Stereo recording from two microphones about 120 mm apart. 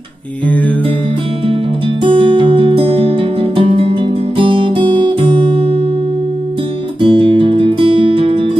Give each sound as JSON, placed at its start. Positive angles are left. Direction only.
{"t": 2.0, "sound": "music", "side_deg": -45}
{"t": 7.0, "sound": "music", "side_deg": -45}